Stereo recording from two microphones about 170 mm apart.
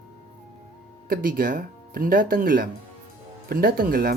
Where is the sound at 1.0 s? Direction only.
55° right (ahead or behind).